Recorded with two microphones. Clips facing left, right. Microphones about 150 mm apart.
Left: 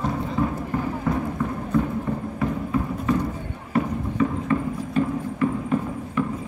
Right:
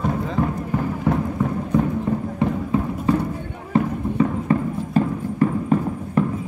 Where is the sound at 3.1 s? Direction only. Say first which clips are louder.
Right 3 dB; 35° right (ahead or behind).